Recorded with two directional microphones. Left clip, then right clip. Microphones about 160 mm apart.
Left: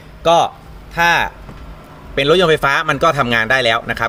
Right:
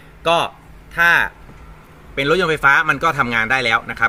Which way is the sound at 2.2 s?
55° left (ahead or behind).